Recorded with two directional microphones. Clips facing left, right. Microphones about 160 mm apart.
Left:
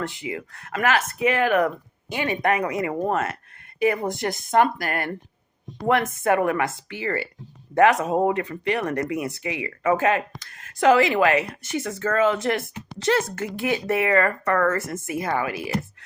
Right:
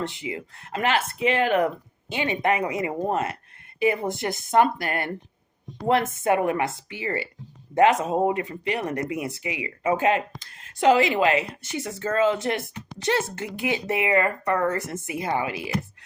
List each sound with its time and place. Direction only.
0.0 s speech: 20° right (ahead or behind)